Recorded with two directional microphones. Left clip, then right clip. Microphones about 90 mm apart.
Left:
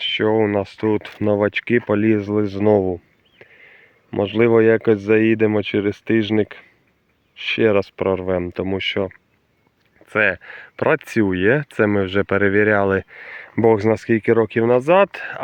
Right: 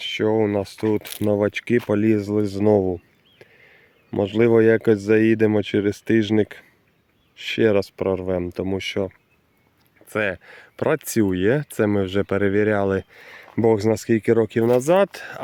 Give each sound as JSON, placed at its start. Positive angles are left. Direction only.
{"t": 0.0, "sound": "speech", "side_deg": -20}
{"t": 7.7, "sound": "speech", "side_deg": -25}